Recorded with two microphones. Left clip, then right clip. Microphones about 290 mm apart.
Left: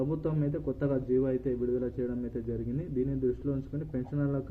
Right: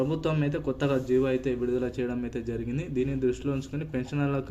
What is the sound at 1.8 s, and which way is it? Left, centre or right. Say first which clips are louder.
Speech: right 3 dB; centre.